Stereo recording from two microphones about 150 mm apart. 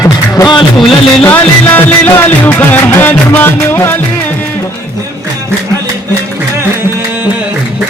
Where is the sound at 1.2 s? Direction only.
15° left (ahead or behind).